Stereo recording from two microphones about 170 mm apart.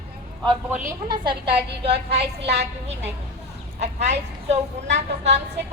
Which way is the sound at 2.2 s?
75° right (ahead or behind).